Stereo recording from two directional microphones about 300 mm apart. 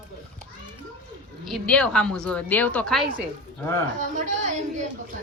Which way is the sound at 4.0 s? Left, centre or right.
Right.